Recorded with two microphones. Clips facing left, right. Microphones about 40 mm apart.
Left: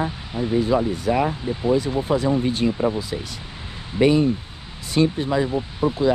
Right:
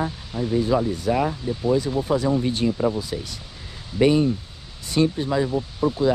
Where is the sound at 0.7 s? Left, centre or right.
Left.